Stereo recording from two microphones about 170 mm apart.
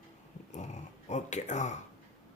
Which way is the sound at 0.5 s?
45° left (ahead or behind).